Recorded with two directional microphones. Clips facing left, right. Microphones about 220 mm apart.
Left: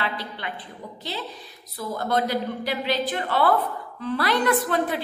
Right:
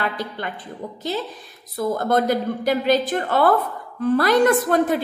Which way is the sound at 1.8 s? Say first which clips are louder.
Right 5 dB; 50° right (ahead or behind).